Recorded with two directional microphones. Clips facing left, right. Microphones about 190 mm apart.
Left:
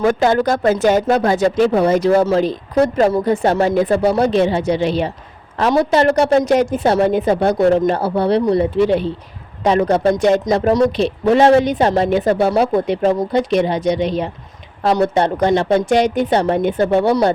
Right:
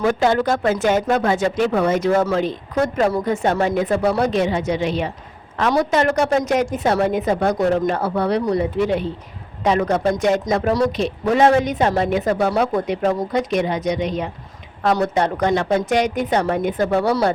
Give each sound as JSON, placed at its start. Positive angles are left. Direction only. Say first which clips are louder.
{"t": 0.0, "sound": "speech", "louder": "left 3 dB", "side_deg": 45}
{"t": 10.7, "sound": "speech", "louder": "left 5 dB", "side_deg": 20}
{"t": 11.0, "sound": "speech", "louder": "left 2 dB", "side_deg": 30}